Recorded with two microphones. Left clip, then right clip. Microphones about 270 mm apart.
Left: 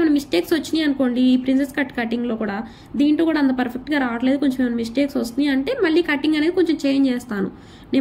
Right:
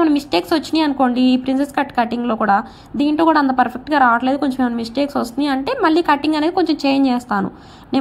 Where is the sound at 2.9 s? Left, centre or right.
Centre.